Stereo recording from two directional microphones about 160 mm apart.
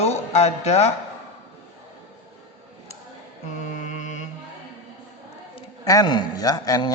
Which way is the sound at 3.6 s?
50° left (ahead or behind).